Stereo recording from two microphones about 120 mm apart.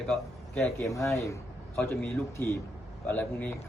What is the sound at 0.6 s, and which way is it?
Speech, 25° left (ahead or behind).